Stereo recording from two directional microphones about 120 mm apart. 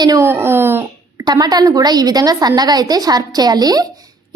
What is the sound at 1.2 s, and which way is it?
Speech, 35° right (ahead or behind).